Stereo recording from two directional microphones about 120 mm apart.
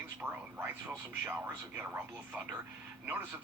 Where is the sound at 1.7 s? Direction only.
15° right (ahead or behind).